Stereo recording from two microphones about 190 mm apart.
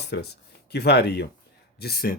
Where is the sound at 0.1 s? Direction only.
60° left (ahead or behind).